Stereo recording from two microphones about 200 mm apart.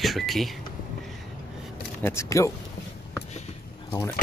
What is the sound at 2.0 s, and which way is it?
Speech, 15° left (ahead or behind).